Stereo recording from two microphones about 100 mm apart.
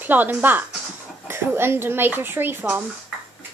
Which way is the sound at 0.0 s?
20° right (ahead or behind).